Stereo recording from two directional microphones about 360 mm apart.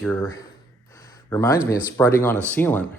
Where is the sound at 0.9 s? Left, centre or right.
Centre.